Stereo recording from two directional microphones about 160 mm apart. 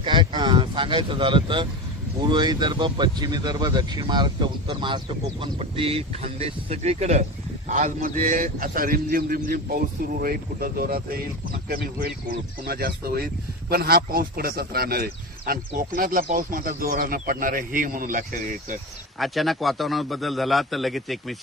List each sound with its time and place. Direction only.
0.0 s speech: 30° right (ahead or behind); by 11.2 s 65° right (ahead or behind)
12.6 s speech: 75° right (ahead or behind); by 18.8 s 55° right (ahead or behind)
19.1 s a man's voice: centre (ahead or behind)